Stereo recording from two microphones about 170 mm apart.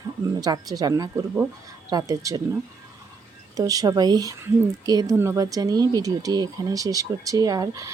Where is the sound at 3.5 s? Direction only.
20° right (ahead or behind).